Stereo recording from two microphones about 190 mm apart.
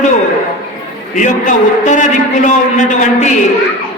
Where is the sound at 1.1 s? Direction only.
40° left (ahead or behind).